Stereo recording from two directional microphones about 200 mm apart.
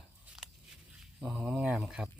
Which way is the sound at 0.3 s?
5° right (ahead or behind).